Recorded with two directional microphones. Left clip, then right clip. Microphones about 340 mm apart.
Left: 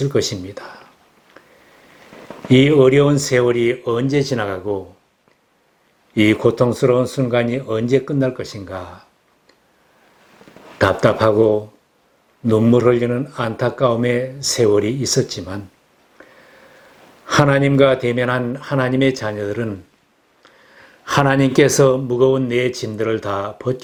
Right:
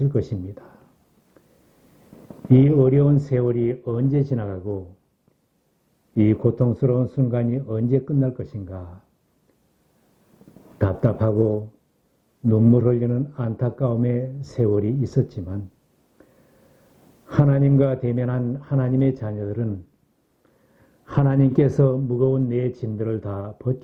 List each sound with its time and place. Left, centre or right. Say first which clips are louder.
0.0 s speech: left 7 dB; centre
2.0 s speech: left 4 dB; centre
6.1 s speech: left 7 dB; centre
10.5 s a man's voice: left 10 dB; centre
11.4 s speech: left 8 dB; left
12.5 s speech: left 6 dB; centre
20.4 s a sound: left 13 dB; centre
22.4 s speech: left 6 dB; centre